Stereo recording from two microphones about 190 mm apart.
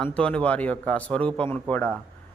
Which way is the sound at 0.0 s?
5° left (ahead or behind).